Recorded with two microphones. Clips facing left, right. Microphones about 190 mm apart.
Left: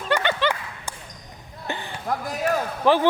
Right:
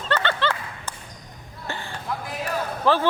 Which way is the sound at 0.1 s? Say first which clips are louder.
Left 2 dB; 15° left (ahead or behind).